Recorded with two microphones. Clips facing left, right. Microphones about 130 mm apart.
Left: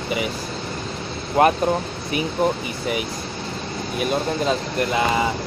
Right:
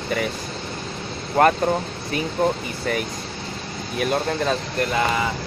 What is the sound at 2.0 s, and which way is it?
Speech, 15° left (ahead or behind).